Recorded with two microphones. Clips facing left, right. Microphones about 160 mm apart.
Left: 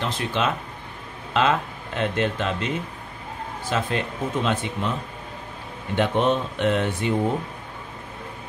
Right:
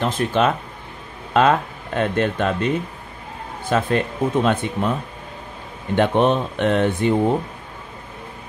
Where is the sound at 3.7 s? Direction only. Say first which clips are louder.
Right 6 dB; 50° right (ahead or behind).